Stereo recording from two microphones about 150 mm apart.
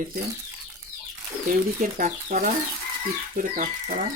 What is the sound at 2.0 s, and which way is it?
Speech, 70° right (ahead or behind).